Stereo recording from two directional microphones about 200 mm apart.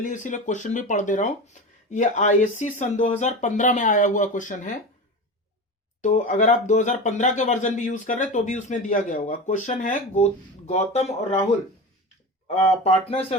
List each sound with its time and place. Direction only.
0.0 s speech: 40° left (ahead or behind)
6.0 s speech: 40° left (ahead or behind)
12.5 s speech: 30° left (ahead or behind)